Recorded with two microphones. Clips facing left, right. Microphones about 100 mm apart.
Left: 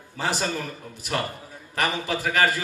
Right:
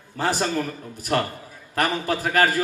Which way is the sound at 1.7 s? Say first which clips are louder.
Right 3 dB; 45° right (ahead or behind).